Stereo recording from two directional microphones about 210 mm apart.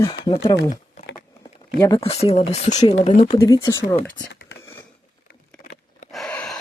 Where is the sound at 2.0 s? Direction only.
30° left (ahead or behind).